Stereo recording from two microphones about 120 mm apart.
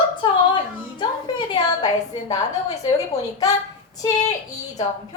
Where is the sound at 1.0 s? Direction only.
40° left (ahead or behind).